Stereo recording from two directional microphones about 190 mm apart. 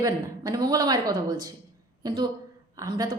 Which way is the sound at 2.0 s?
25° right (ahead or behind).